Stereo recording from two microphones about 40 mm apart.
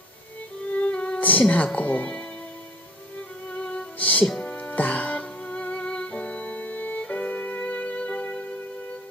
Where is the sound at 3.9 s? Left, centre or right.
Left.